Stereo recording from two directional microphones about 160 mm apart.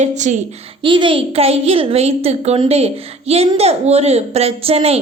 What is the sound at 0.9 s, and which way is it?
A woman's voice, 30° right (ahead or behind).